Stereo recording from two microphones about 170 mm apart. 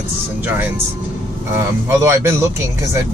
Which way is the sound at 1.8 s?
15° right (ahead or behind).